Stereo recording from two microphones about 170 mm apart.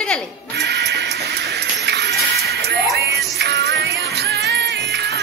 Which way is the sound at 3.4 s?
80° right.